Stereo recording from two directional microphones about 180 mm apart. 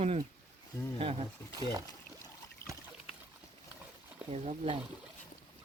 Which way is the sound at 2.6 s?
15° left (ahead or behind).